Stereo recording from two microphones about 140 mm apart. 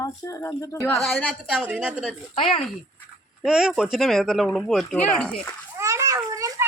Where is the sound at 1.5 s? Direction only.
10° right (ahead or behind).